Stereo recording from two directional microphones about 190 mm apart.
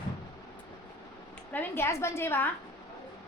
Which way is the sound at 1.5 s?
10° left (ahead or behind).